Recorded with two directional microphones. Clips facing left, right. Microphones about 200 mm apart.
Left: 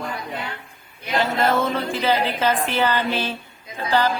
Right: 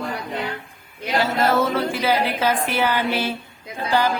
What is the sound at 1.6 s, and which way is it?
A woman's voice, 10° right (ahead or behind).